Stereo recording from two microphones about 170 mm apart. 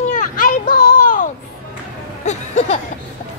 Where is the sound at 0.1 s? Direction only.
55° left (ahead or behind).